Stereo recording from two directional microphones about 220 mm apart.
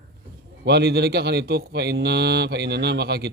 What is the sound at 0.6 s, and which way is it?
A man's voice, 50° right (ahead or behind).